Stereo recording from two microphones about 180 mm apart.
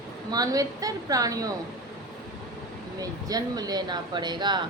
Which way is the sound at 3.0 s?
20° right (ahead or behind).